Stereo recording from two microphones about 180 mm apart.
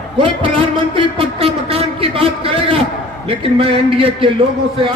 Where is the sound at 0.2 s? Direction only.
30° right (ahead or behind).